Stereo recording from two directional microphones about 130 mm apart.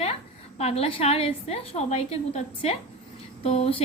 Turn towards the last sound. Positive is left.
turn(degrees=50)  # may be behind; listen again after turning